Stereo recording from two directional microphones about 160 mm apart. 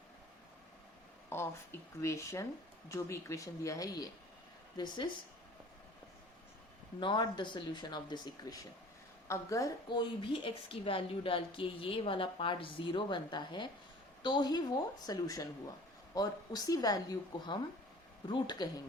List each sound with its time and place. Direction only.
1.3 s speech: 15° left (ahead or behind)
7.0 s a woman's voice: 30° left (ahead or behind)